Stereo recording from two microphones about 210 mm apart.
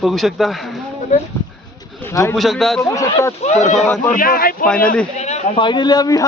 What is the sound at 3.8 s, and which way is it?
Speech, 5° left (ahead or behind).